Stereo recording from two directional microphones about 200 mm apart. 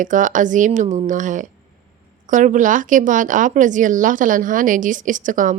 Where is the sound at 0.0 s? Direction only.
40° right (ahead or behind).